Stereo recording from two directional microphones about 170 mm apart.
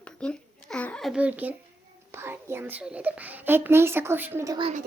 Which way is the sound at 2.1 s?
15° right (ahead or behind).